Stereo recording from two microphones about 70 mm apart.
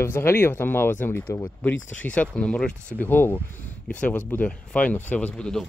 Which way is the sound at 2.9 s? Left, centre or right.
Left.